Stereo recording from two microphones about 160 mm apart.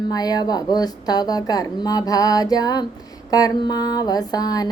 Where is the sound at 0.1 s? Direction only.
25° left (ahead or behind).